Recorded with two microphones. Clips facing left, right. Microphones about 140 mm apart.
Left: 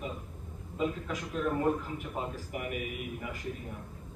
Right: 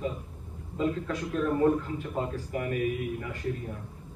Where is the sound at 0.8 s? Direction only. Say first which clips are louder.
Right 4 dB; 15° left (ahead or behind).